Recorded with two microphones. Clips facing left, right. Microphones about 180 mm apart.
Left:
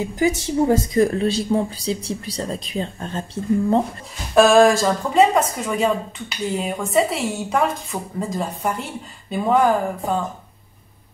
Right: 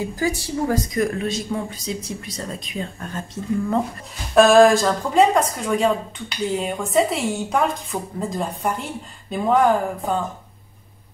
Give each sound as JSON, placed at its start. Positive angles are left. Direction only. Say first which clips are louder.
{"t": 0.0, "sound": "speech", "louder": "left 3 dB", "side_deg": 20}
{"t": 4.4, "sound": "speech", "louder": "right 1 dB", "side_deg": 0}